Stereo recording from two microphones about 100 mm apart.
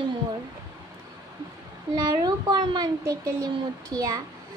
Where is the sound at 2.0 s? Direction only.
40° right (ahead or behind).